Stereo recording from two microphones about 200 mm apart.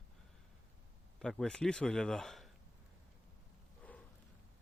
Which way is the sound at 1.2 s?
5° left (ahead or behind).